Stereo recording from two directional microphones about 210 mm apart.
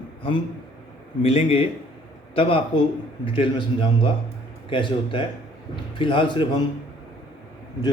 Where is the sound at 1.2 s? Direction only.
25° left (ahead or behind).